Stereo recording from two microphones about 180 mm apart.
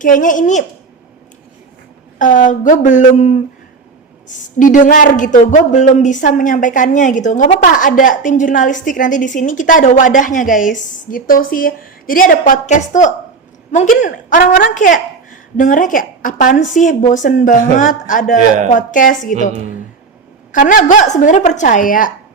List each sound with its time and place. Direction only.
0.0 s speech: 45° left (ahead or behind)
2.1 s speech: 45° left (ahead or behind)
20.5 s speech: 45° left (ahead or behind)